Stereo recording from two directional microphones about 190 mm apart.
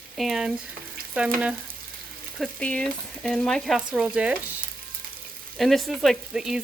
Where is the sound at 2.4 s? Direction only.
5° left (ahead or behind).